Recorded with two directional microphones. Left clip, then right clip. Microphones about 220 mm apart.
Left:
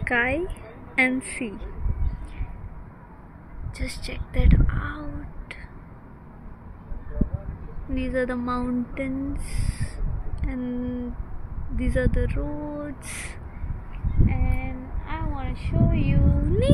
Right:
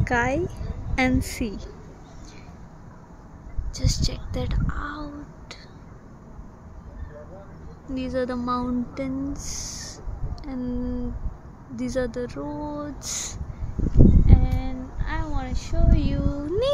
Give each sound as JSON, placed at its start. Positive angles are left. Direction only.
{"t": 0.0, "sound": "a woman's voice", "side_deg": -10}
{"t": 3.7, "sound": "speech", "side_deg": -10}
{"t": 7.9, "sound": "speech", "side_deg": 0}
{"t": 14.2, "sound": "a sound", "side_deg": -20}